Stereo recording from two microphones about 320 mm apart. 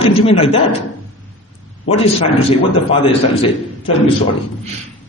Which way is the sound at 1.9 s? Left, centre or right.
Centre.